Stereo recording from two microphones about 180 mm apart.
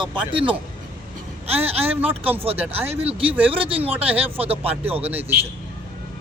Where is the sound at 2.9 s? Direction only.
35° right (ahead or behind).